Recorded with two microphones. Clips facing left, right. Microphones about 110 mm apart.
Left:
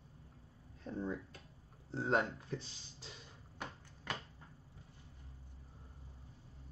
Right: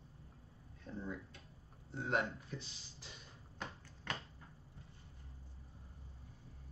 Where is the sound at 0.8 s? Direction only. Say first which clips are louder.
Left 5 dB; 30° left (ahead or behind).